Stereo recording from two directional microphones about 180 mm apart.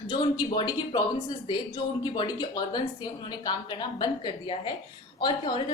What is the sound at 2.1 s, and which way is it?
A woman's voice, 25° left (ahead or behind).